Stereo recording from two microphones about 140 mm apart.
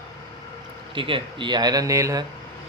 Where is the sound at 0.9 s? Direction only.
40° right (ahead or behind).